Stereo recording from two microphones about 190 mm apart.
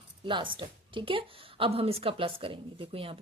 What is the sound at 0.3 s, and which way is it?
A woman's voice, 25° right (ahead or behind).